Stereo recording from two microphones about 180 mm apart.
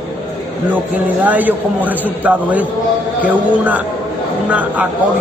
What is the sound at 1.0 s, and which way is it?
A man's voice, 10° right (ahead or behind).